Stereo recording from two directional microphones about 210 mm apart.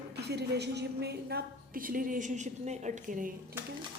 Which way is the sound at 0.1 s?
50° right (ahead or behind).